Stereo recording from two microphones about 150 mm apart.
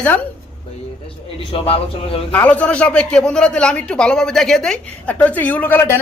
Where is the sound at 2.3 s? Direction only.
10° left (ahead or behind).